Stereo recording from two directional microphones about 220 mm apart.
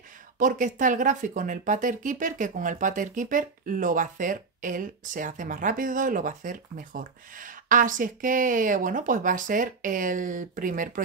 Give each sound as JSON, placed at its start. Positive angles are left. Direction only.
{"t": 0.4, "sound": "speech", "side_deg": -35}